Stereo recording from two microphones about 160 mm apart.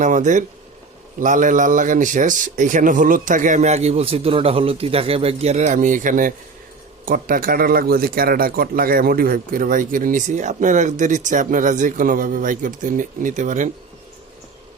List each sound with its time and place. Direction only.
0.0 s a man's voice: 50° right (ahead or behind)